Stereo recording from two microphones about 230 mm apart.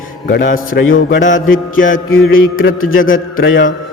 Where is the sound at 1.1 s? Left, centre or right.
Left.